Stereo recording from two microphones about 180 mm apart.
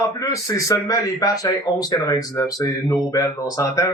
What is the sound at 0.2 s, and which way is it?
A man's voice, 15° left (ahead or behind).